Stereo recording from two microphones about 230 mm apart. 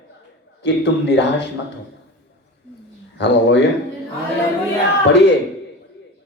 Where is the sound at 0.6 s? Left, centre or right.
Left.